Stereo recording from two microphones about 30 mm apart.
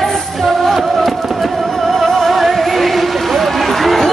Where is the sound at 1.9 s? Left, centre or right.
Centre.